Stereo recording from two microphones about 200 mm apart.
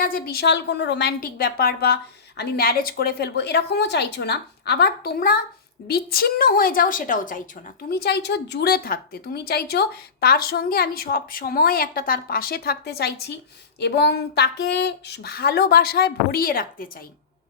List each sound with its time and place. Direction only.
0.0 s a woman's voice: 45° left (ahead or behind)
7.9 s a woman's voice: 50° left (ahead or behind)